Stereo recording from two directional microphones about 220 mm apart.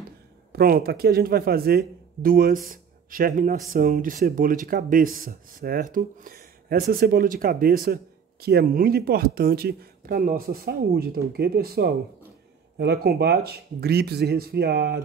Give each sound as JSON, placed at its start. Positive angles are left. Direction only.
{"t": 0.5, "sound": "speech", "side_deg": -45}